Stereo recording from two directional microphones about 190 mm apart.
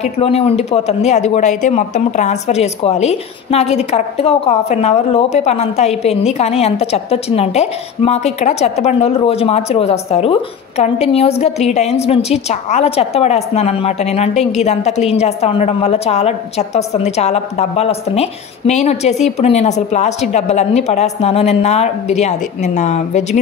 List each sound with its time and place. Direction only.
0.0 s a woman's voice: 30° left (ahead or behind)